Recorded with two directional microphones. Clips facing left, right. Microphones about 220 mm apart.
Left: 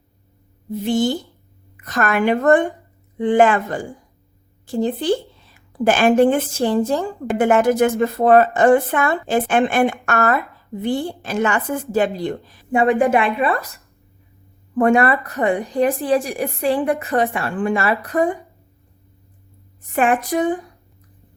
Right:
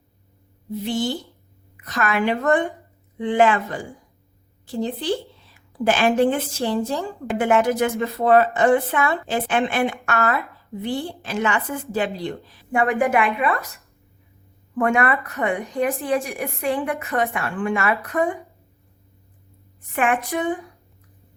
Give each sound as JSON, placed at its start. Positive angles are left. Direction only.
{"t": 0.8, "sound": "a woman's voice", "side_deg": 50}
{"t": 4.6, "sound": "a woman's voice", "side_deg": 50}
{"t": 12.7, "sound": "a woman's voice", "side_deg": 25}
{"t": 14.8, "sound": "a woman's voice", "side_deg": 35}
{"t": 19.9, "sound": "a woman's voice", "side_deg": 35}